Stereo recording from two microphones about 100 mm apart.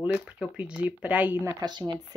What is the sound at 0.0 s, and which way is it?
Speech, 10° right (ahead or behind).